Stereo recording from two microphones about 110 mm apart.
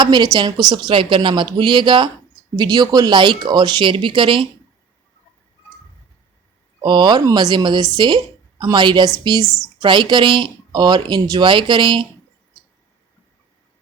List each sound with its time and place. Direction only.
0.0 s speech: 40° right (ahead or behind)
6.8 s a woman's voice: 40° right (ahead or behind)